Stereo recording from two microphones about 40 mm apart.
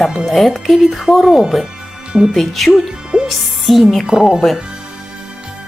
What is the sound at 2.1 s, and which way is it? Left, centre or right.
Speech, right.